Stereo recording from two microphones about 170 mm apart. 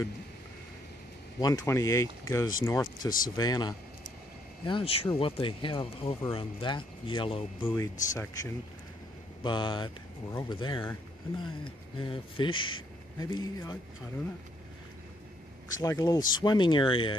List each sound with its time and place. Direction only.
1.4 s speech: 20° left (ahead or behind)
7.6 s speech: 15° left (ahead or behind)
9.4 s speech: 25° left (ahead or behind)
15.8 s speech: 20° left (ahead or behind)